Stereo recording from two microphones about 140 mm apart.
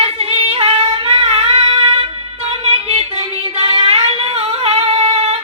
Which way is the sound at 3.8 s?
45° right (ahead or behind).